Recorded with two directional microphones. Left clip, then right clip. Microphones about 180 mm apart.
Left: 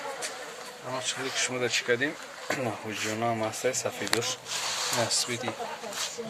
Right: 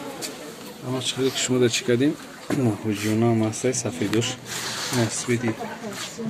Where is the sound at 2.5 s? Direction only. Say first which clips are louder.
Right 6 dB; centre (ahead or behind).